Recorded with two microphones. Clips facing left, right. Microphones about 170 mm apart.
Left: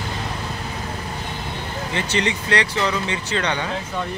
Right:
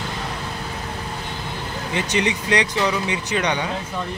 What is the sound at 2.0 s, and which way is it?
Speech, 15° right (ahead or behind).